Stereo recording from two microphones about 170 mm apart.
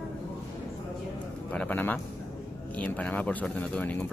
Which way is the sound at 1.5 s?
10° left (ahead or behind).